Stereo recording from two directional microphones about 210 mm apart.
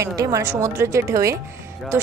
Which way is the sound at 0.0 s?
15° right (ahead or behind).